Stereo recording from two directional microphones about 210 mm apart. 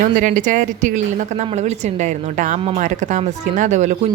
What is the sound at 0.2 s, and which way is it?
A woman's voice, 40° right (ahead or behind).